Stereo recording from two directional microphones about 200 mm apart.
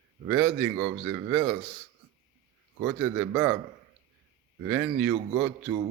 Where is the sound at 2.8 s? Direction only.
10° right (ahead or behind).